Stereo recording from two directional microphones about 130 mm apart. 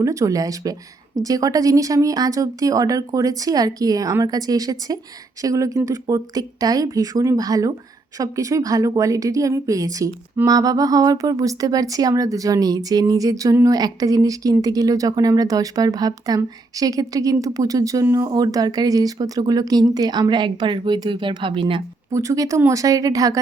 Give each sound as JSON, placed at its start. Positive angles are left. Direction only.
{"t": 0.0, "sound": "speech", "side_deg": -25}
{"t": 22.1, "sound": "speech", "side_deg": -25}